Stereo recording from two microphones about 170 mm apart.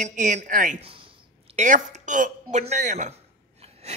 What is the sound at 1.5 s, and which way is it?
Speech, 45° right (ahead or behind).